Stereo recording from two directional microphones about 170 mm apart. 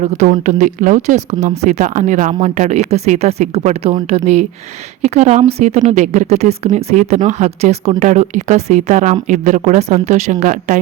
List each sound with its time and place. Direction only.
0.0 s speech: 45° right (ahead or behind)